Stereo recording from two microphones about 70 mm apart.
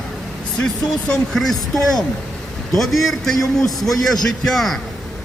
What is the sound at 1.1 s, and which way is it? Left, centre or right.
A man's voice, centre.